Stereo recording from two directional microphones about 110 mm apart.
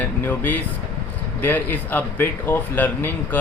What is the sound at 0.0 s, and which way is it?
Air conditioning, 15° left (ahead or behind).